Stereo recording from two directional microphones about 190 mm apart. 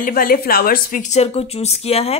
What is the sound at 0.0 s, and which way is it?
Speech, 50° left (ahead or behind).